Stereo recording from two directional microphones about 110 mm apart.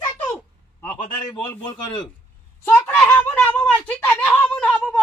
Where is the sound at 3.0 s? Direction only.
15° left (ahead or behind).